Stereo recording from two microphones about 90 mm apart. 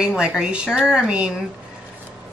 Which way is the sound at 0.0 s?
10° right (ahead or behind).